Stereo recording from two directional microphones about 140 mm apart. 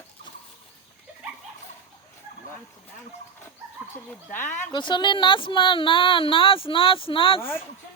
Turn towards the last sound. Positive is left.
turn(degrees=15)  # may be behind; listen again after turning